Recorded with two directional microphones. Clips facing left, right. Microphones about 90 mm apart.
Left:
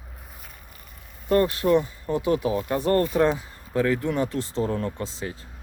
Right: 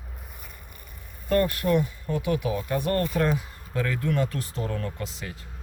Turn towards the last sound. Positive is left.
turn(degrees=30)  # may be behind; listen again after turning